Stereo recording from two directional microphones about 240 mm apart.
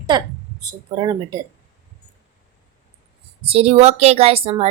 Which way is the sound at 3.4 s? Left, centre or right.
Right.